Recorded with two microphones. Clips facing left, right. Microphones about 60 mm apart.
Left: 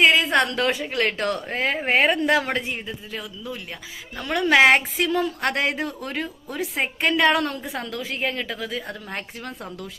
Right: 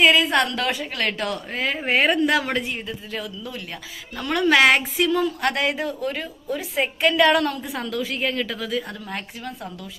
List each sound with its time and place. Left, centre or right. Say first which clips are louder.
0.0 s a woman's voice: even; left
1.5 s a sound: left 1 dB; left
2.0 s a woman's voice: even; left
2.7 s speech: right 2 dB; centre
4.2 s a woman's voice: even; centre
4.7 s a sound: even; left
5.8 s speech: right 2 dB; left
6.7 s a woman's voice: right 3 dB; left